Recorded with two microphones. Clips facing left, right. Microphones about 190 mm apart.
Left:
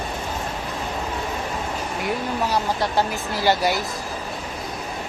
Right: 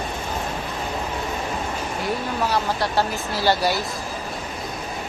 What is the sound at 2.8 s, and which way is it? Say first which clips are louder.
Speech: even; 15° left (ahead or behind).